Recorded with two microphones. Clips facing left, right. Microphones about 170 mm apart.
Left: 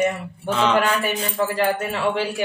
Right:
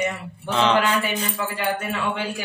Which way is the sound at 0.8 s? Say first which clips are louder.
Left 1 dB; 40° left (ahead or behind).